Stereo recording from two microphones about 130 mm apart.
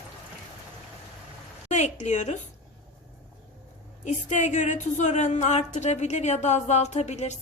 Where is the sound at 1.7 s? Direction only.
65° left (ahead or behind).